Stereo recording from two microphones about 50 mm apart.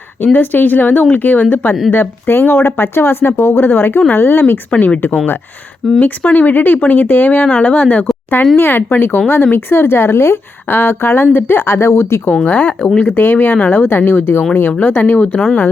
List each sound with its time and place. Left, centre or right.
0.3 s a woman's voice: left
4.7 s speech: left
6.0 s speech: left
8.5 s a woman's voice: left
12.5 s speech: left
13.0 s speech: left
13.9 s a woman's voice: left